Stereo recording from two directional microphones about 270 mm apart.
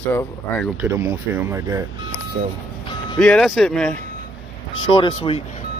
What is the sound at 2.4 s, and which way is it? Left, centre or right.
Speech, right.